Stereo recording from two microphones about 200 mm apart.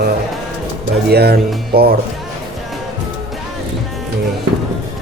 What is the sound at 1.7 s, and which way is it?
Speech, 50° right (ahead or behind).